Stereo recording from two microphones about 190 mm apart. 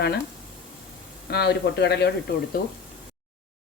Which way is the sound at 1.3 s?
60° left (ahead or behind).